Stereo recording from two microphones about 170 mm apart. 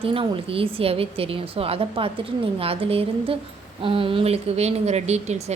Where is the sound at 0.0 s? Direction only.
30° right (ahead or behind).